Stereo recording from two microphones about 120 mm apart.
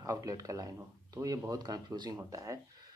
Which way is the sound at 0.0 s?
30° right (ahead or behind).